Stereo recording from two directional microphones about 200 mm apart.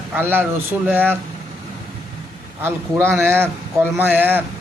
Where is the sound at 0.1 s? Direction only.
10° right (ahead or behind).